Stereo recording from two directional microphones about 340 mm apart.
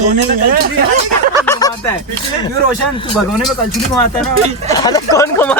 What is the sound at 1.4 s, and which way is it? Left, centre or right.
Snicker, centre.